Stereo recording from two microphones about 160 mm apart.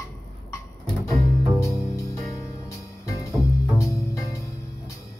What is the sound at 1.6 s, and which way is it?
Music, 20° left (ahead or behind).